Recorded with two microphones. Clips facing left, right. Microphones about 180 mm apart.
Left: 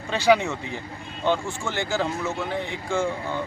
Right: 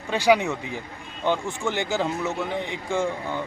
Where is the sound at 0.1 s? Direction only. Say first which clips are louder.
Even; 10° right (ahead or behind).